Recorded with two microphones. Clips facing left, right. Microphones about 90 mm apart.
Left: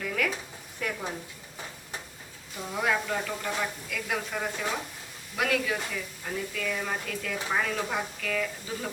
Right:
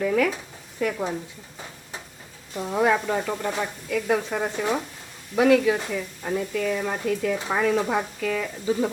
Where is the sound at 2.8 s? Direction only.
30° right (ahead or behind).